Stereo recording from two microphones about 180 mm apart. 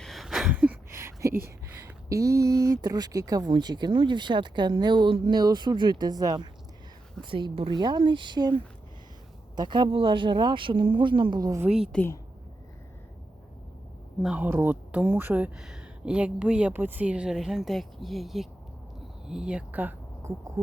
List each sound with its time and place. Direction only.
0.0 s a sound: centre (ahead or behind)
2.0 s speech: 20° right (ahead or behind)
11.6 s speech: 5° right (ahead or behind)
11.9 s speech: 10° left (ahead or behind)
14.2 s speech: 5° right (ahead or behind)